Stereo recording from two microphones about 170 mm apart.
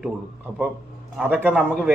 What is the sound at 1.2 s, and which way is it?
Speech, 10° right (ahead or behind).